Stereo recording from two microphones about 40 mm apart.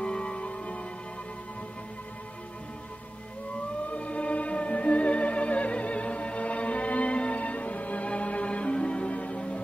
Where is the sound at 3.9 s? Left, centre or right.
Left.